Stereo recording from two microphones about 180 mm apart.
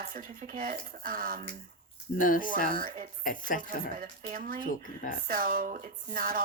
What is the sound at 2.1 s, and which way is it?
Speech, 50° left (ahead or behind).